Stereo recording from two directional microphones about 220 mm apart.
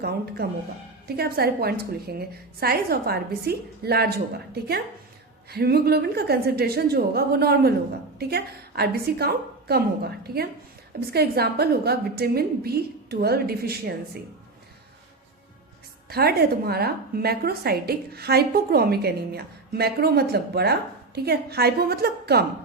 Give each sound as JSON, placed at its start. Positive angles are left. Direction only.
{"t": 0.4, "sound": "a woman's voice", "side_deg": -45}
{"t": 5.5, "sound": "a woman's voice", "side_deg": -45}
{"t": 16.0, "sound": "a woman's voice", "side_deg": -45}